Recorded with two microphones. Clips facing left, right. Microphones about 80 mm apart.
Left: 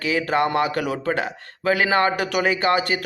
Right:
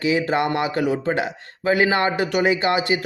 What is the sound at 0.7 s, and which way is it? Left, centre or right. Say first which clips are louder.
Speech: right 2 dB; right.